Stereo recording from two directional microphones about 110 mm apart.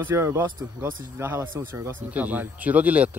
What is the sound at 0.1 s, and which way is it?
Speech, 25° right (ahead or behind).